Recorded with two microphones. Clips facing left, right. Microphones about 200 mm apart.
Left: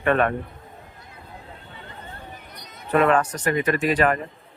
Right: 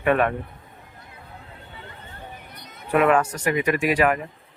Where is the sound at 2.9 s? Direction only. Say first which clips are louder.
Even; 10° right (ahead or behind).